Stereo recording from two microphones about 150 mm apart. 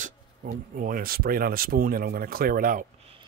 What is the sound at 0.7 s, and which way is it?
A man's voice, 75° right (ahead or behind).